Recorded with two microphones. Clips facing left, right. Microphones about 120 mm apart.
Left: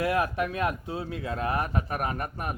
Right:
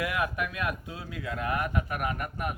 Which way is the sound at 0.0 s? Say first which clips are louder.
Left 4 dB; 35° left (ahead or behind).